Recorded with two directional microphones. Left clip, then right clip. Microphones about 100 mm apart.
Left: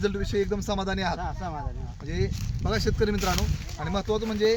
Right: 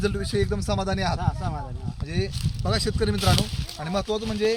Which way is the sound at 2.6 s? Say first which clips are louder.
Right 1 dB; 30° right (ahead or behind).